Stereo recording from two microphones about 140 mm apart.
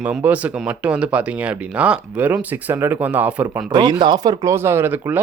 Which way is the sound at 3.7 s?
35° right (ahead or behind).